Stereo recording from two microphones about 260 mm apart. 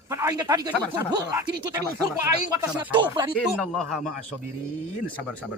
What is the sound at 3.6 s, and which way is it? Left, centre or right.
Speech, centre.